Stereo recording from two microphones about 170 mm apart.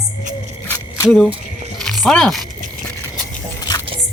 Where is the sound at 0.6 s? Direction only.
15° left (ahead or behind).